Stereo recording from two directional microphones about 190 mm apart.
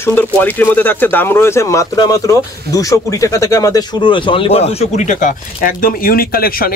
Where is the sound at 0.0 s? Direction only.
10° left (ahead or behind).